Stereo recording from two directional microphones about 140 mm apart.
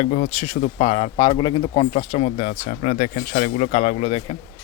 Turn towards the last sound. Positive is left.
turn(degrees=45)  # may be behind; listen again after turning